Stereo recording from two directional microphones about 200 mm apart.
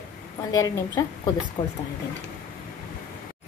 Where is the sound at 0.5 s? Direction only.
15° left (ahead or behind).